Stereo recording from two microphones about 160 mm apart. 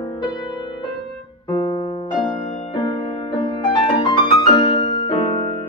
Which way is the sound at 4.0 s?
30° left (ahead or behind).